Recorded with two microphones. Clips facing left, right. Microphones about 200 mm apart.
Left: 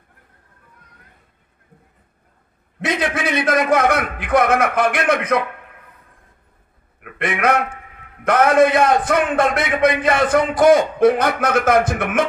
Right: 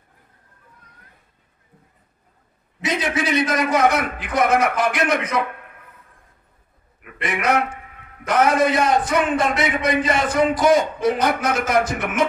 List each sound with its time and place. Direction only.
2.8 s a man's voice: 55° left (ahead or behind)
7.0 s a man's voice: 55° left (ahead or behind)